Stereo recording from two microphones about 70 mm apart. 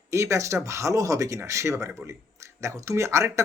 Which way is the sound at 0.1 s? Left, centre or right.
Right.